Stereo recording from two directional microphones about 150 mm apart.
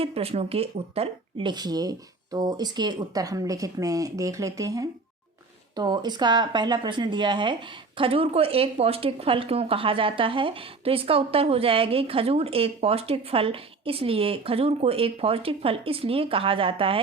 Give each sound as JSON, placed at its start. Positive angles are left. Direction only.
{"t": 0.0, "sound": "speech", "side_deg": -40}